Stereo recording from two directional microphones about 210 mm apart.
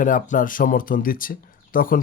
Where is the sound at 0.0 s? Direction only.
40° left (ahead or behind).